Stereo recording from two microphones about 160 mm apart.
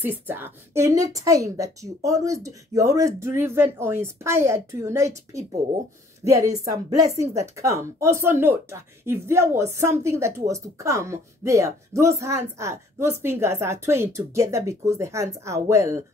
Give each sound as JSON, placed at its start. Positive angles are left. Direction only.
{"t": 0.0, "sound": "a woman's voice", "side_deg": -15}
{"t": 6.6, "sound": "a woman's voice", "side_deg": -20}